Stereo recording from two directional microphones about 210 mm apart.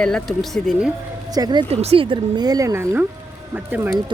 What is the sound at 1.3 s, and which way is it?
Speech, 20° right (ahead or behind).